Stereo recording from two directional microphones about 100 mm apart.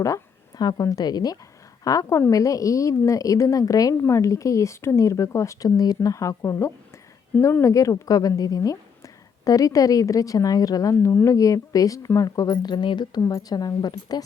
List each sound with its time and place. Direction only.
0.0 s a woman's voice: 35° left (ahead or behind)
10.9 s a woman's voice: 25° left (ahead or behind); by 14.3 s 40° left (ahead or behind)